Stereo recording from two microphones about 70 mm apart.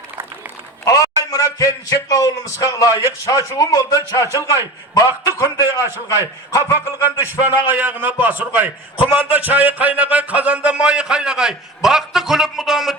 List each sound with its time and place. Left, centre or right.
0.9 s a man's voice: left
7.2 s a man's voice: right; by 13.0 s centre